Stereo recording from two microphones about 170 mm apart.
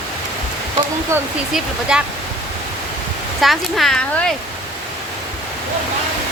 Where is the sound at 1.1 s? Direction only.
15° right (ahead or behind).